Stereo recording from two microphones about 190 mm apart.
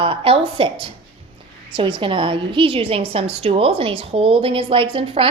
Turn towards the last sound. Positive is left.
turn(degrees=-30)  # may be behind; listen again after turning